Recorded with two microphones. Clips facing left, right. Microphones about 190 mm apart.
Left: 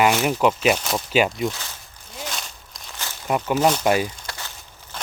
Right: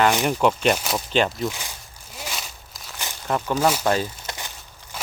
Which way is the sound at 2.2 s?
5° right (ahead or behind).